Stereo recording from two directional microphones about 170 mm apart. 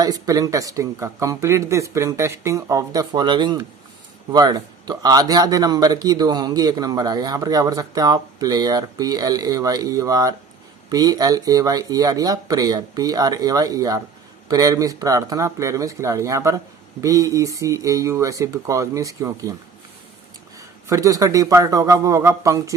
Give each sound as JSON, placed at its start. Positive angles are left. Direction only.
{"t": 0.0, "sound": "a man's voice", "side_deg": -20}
{"t": 20.8, "sound": "a man's voice", "side_deg": -20}